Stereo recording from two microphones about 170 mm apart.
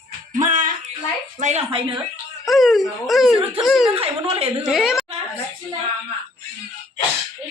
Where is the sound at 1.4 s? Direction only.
40° right (ahead or behind).